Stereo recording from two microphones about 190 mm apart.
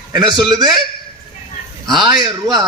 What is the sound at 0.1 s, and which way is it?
Speech, 25° right (ahead or behind).